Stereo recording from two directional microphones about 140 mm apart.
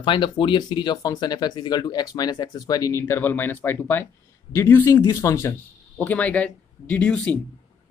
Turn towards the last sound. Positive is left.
turn(degrees=10)  # may be behind; listen again after turning